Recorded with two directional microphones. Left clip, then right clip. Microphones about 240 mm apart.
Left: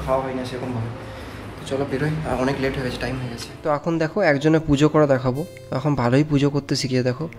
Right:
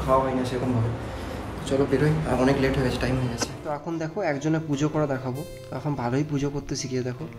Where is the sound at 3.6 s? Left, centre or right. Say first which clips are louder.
Left 14 dB; left.